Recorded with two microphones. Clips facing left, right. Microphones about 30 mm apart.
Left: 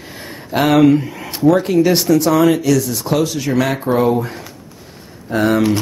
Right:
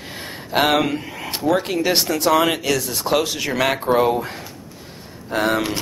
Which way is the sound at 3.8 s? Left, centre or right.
Centre.